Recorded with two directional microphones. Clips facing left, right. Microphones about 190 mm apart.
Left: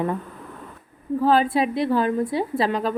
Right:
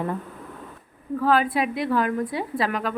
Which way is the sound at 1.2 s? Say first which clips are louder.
Left 2 dB; 25° left (ahead or behind).